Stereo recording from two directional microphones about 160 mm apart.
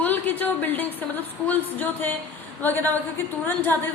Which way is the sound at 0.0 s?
10° left (ahead or behind).